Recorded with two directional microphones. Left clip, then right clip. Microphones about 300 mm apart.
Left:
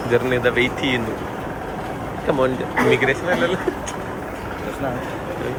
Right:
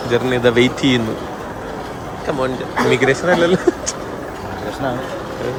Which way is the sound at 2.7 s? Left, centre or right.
Centre.